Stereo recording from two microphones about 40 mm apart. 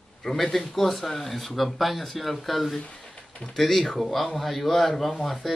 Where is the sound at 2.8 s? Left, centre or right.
Left.